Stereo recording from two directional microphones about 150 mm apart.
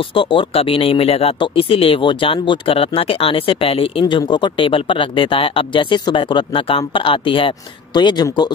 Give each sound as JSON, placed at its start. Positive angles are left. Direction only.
{"t": 0.1, "sound": "speech", "side_deg": 35}